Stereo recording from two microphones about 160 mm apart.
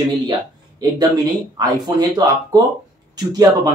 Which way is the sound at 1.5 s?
25° right (ahead or behind).